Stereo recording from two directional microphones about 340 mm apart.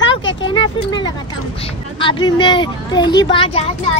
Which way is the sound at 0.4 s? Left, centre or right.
Centre.